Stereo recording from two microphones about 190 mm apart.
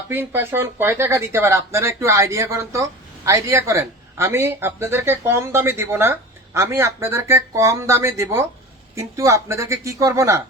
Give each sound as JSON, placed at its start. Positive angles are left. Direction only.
{"t": 0.1, "sound": "speech", "side_deg": -10}